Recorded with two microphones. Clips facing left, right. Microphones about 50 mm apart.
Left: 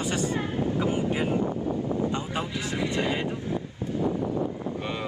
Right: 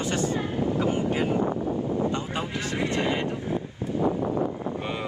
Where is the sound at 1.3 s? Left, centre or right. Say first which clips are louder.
Right 2 dB; right.